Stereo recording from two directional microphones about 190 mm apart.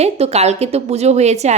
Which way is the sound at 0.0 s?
35° right (ahead or behind).